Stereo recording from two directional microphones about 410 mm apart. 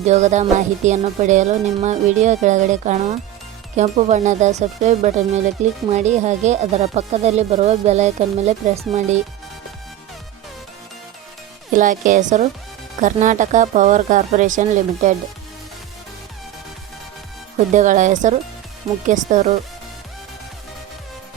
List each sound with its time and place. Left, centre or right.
0.0 s speech: centre
11.7 s speech: centre
17.7 s speech: centre